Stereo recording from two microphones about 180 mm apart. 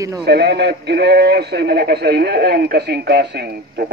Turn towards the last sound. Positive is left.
turn(degrees=-60)  # may be behind; listen again after turning